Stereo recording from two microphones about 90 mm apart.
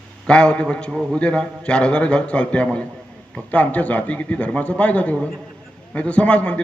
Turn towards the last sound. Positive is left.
turn(degrees=15)  # may be behind; listen again after turning